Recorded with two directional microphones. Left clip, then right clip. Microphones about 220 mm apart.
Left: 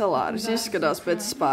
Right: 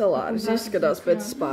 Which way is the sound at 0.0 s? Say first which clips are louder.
Right 1 dB; 25° left (ahead or behind).